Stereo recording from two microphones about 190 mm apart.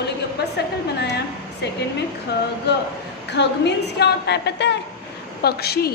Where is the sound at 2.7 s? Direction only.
60° left (ahead or behind).